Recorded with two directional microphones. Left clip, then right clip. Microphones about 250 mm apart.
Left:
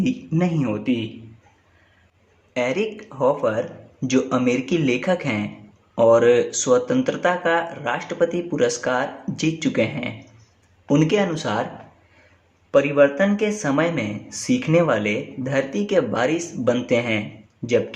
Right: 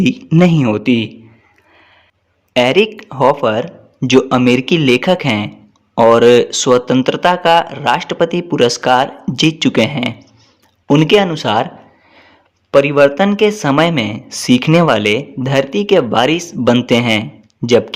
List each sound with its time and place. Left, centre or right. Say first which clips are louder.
0.0 s speech: right 11 dB; right
2.5 s speech: right 11 dB; right
12.7 s speech: right 7 dB; right